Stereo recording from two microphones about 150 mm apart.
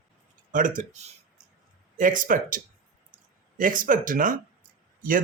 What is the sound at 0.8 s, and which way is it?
Speech, 50° right (ahead or behind).